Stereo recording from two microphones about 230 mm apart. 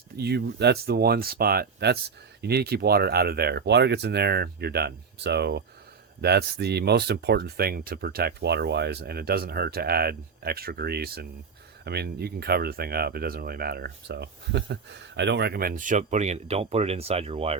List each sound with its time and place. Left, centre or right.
0.2 s speech: right